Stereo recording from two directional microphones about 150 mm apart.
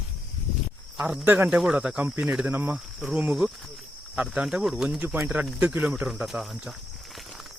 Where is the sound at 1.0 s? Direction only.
Centre (ahead or behind).